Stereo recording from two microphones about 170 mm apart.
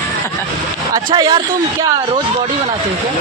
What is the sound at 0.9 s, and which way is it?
Speech, 20° right (ahead or behind).